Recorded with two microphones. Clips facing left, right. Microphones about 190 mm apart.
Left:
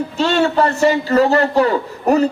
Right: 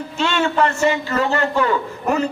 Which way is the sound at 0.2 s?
35° left (ahead or behind).